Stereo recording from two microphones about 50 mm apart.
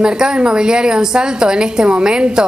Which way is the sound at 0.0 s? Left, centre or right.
Centre.